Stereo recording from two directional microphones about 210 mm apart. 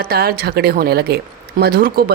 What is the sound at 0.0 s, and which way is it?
Speech, 45° right (ahead or behind).